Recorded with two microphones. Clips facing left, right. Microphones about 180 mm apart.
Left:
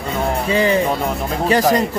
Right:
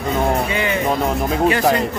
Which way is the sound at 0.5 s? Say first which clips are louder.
Left 5 dB; 35° left (ahead or behind).